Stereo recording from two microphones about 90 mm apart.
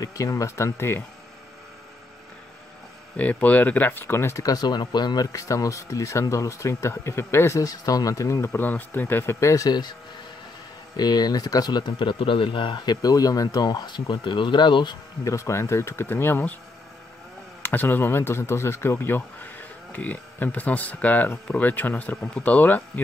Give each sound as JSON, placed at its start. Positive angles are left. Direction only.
{"t": 0.0, "sound": "speech", "side_deg": 40}
{"t": 3.2, "sound": "speech", "side_deg": 15}
{"t": 8.6, "sound": "speech", "side_deg": 20}
{"t": 9.7, "sound": "speech", "side_deg": 50}
{"t": 11.0, "sound": "speech", "side_deg": 50}
{"t": 15.2, "sound": "speech", "side_deg": 35}
{"t": 17.6, "sound": "speech", "side_deg": 20}